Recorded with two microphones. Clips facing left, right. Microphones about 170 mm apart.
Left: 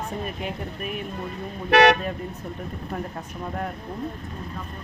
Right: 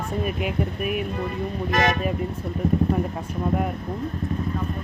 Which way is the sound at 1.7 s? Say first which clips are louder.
Left 7 dB; 70° left (ahead or behind).